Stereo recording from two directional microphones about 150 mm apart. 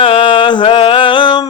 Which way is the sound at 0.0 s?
35° left (ahead or behind).